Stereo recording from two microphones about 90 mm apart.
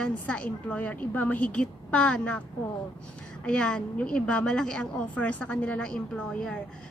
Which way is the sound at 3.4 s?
10° left (ahead or behind).